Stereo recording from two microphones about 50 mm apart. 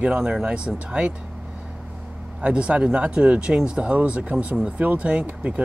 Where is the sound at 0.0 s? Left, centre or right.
Centre.